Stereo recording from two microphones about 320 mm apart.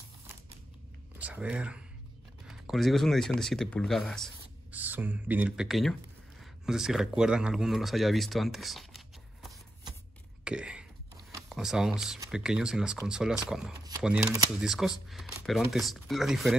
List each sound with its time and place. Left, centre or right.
1.1 s speech: centre
10.4 s a sound: centre
11.4 s speech: centre